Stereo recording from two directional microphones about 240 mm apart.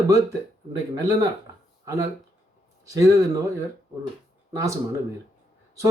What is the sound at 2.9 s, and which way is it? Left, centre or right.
Speech, centre.